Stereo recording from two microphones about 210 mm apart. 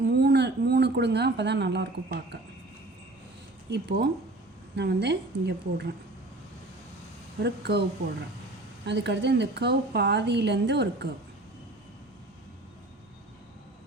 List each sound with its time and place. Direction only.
0.0 s a sound: 50° right (ahead or behind)
3.7 s a woman's voice: 50° right (ahead or behind)
7.4 s a woman's voice: 50° right (ahead or behind)